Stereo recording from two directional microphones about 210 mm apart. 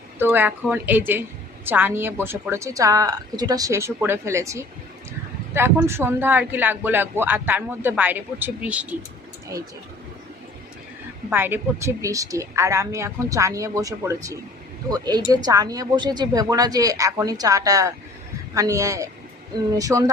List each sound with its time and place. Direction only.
0.2 s speech: 10° right (ahead or behind)
11.3 s speech: 10° right (ahead or behind)